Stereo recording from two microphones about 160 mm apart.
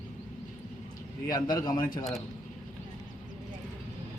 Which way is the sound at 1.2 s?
25° left (ahead or behind).